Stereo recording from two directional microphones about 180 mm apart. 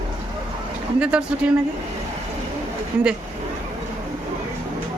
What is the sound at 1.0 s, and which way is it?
Speech, 5° right (ahead or behind).